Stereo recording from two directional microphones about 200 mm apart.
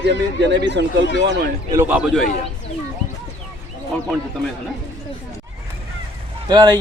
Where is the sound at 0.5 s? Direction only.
60° right (ahead or behind).